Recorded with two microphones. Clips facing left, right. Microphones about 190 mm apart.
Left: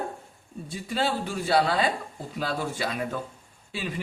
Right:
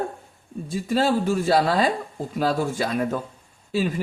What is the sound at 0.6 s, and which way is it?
Speech, 45° right (ahead or behind).